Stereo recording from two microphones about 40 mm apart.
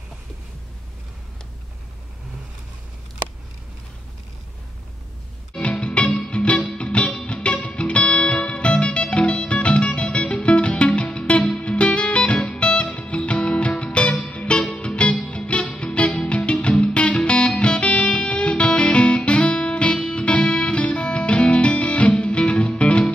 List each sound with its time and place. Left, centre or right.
5.6 s music: left